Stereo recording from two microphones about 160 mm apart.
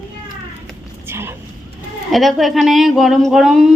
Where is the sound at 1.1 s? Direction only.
15° right (ahead or behind).